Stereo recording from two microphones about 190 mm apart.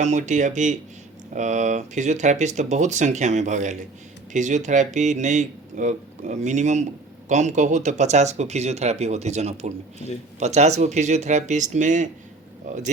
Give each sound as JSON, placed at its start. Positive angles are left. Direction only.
{"t": 0.0, "sound": "speech", "side_deg": -40}